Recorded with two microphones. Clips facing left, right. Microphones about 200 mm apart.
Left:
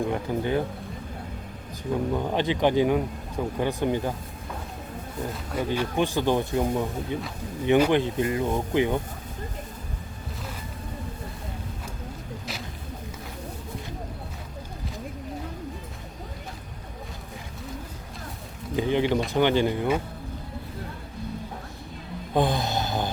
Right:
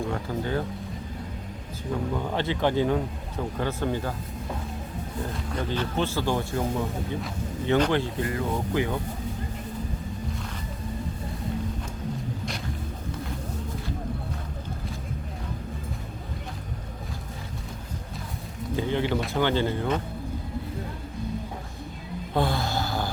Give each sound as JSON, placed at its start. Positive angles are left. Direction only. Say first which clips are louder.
{"t": 0.0, "sound": "speech", "louder": "left 3 dB", "side_deg": 15}
{"t": 2.1, "sound": "speech", "louder": "left 3 dB", "side_deg": 15}
{"t": 5.5, "sound": "speech", "louder": "left 3 dB", "side_deg": 10}
{"t": 18.8, "sound": "a sound", "louder": "left 3 dB", "side_deg": 15}
{"t": 19.3, "sound": "speech", "louder": "left 3 dB", "side_deg": 15}
{"t": 22.4, "sound": "a sound", "louder": "left 2 dB", "side_deg": 20}